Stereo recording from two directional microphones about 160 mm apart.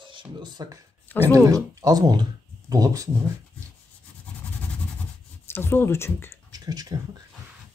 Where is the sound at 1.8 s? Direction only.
25° right (ahead or behind).